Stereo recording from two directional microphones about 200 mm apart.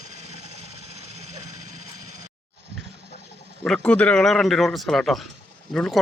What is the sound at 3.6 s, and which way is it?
Speech, 5° left (ahead or behind).